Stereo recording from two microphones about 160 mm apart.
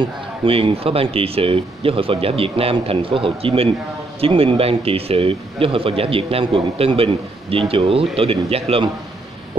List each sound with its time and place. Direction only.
0.0 s speech: 35° right (ahead or behind)